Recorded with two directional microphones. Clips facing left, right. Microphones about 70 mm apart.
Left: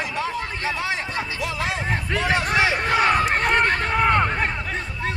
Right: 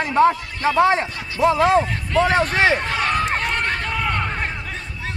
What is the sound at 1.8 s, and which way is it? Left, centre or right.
Speech, left.